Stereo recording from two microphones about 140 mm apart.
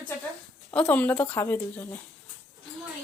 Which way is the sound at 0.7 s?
10° left (ahead or behind).